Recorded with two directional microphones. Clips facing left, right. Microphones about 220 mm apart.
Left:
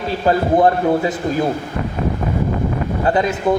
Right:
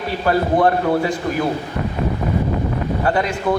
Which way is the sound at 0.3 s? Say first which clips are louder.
Left 2 dB; 20° left (ahead or behind).